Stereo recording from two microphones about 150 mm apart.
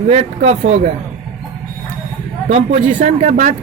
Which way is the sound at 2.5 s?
45° right (ahead or behind).